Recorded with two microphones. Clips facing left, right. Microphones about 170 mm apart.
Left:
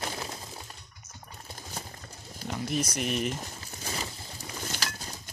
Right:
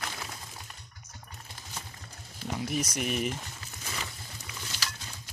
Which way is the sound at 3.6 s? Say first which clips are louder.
Left 3 dB; 35° left (ahead or behind).